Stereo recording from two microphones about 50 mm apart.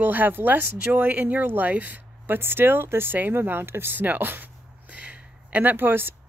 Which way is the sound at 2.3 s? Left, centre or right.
Right.